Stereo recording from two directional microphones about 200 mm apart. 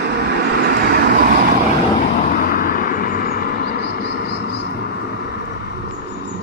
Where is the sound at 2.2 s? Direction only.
45° left (ahead or behind).